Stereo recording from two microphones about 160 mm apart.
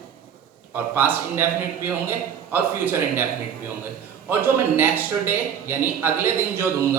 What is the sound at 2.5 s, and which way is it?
Speech, 10° right (ahead or behind).